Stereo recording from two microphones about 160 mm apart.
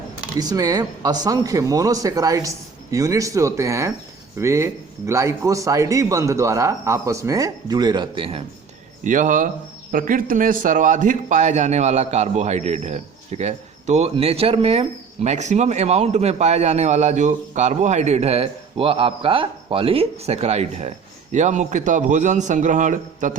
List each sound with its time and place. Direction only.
0.3 s speech: 25° right (ahead or behind)
9.0 s a man's voice: 55° right (ahead or behind)